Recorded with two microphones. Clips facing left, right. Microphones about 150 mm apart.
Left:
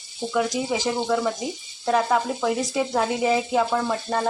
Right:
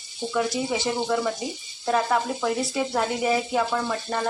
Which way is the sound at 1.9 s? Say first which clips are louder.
Left 2 dB; 10° left (ahead or behind).